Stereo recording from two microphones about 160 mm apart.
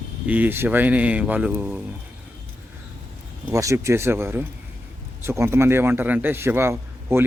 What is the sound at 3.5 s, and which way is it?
A man's voice, 20° right (ahead or behind).